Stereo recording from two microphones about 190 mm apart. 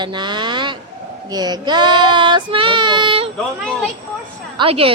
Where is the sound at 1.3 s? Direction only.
20° right (ahead or behind).